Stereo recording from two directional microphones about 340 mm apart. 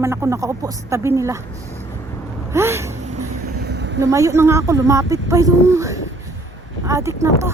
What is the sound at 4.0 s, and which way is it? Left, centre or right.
A woman's voice, centre.